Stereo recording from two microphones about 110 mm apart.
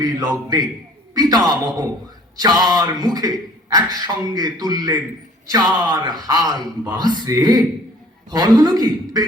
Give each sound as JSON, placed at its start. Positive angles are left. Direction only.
{"t": 0.0, "sound": "a man's voice", "side_deg": -35}